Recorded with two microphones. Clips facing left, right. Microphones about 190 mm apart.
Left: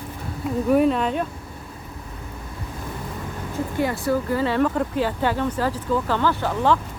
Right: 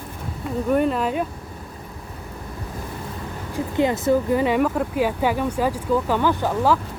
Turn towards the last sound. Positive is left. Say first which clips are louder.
# right 1 dB
turn(degrees=-15)  # may be behind; listen again after turning